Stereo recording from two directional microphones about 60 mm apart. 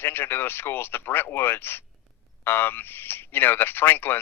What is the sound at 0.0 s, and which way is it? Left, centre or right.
Speech, left.